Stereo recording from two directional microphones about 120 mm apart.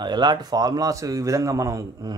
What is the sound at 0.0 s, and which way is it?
A man's voice, 40° right (ahead or behind).